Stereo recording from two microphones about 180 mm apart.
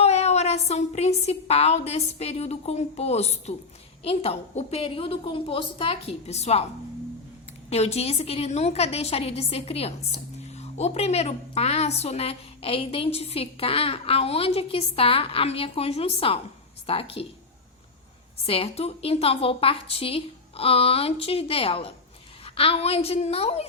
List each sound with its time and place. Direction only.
0.0 s a woman's voice: 35° left (ahead or behind)
7.7 s a woman's voice: 35° left (ahead or behind)
18.4 s a woman's voice: 30° left (ahead or behind)